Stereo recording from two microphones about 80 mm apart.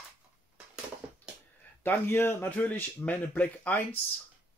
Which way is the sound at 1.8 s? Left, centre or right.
Left.